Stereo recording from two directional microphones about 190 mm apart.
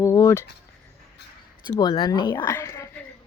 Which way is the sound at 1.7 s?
20° left (ahead or behind).